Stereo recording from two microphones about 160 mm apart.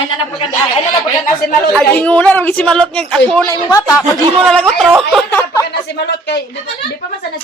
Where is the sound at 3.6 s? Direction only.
25° left (ahead or behind).